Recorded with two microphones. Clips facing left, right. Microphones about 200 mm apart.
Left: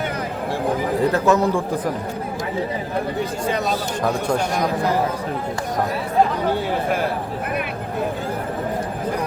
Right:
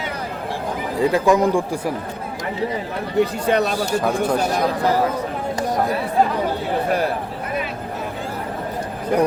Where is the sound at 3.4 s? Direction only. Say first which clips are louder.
Right 4 dB; 65° right (ahead or behind).